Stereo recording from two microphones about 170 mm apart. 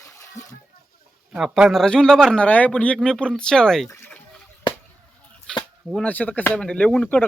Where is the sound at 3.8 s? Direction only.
15° left (ahead or behind).